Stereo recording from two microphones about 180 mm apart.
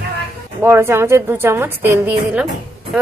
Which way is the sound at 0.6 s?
15° right (ahead or behind).